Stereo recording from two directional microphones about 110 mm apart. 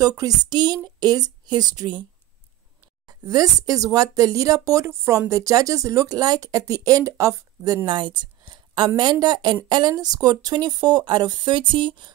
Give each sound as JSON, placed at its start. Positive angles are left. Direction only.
{"t": 0.0, "sound": "speech", "side_deg": -35}
{"t": 3.1, "sound": "speech", "side_deg": -35}